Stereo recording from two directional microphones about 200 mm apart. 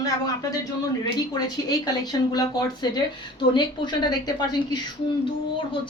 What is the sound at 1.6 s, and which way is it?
Speech, 20° left (ahead or behind).